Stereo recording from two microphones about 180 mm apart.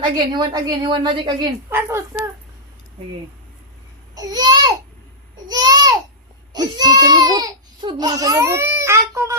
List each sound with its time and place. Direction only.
0.3 s a woman's voice: 25° right (ahead or behind)
1.7 s speech: 15° right (ahead or behind)
4.1 s babbling: 20° right (ahead or behind)
6.5 s baby cry: 20° right (ahead or behind)